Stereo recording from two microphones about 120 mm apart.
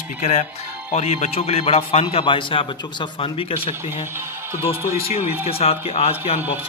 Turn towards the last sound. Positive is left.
turn(degrees=55)  # may be behind; listen again after turning